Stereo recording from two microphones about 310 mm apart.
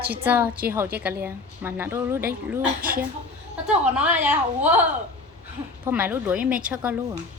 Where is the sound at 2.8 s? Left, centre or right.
Right.